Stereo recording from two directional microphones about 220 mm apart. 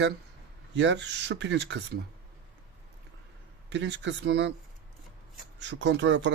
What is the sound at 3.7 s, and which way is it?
Speech, 55° right (ahead or behind).